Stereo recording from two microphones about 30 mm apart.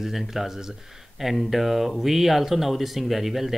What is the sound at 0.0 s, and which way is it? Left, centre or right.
Speech, centre.